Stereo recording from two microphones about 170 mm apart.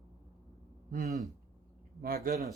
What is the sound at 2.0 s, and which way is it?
Speech, 60° right (ahead or behind).